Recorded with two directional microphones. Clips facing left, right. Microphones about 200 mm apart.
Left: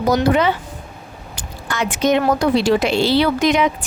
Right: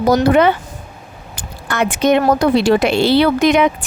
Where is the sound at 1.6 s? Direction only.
60° right (ahead or behind).